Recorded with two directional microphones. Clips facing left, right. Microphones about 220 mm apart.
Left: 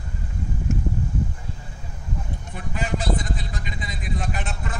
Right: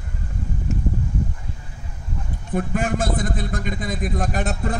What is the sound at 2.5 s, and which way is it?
A man's voice, 50° right (ahead or behind).